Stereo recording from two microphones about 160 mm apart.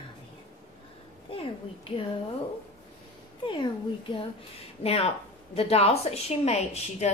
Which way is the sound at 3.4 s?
30° left (ahead or behind).